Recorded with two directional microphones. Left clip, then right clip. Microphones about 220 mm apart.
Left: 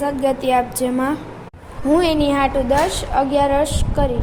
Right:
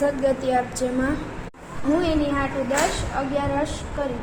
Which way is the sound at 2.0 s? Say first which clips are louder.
Left 7 dB; 50° left (ahead or behind).